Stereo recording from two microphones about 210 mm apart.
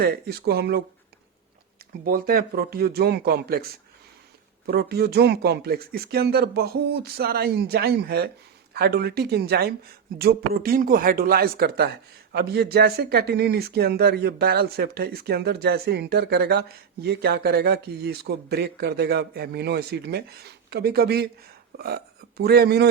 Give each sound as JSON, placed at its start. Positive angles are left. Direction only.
{"t": 0.0, "sound": "speech", "side_deg": -50}
{"t": 2.0, "sound": "speech", "side_deg": -45}